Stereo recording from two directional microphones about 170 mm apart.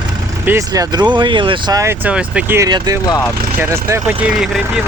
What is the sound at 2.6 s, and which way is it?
Speech, 20° right (ahead or behind).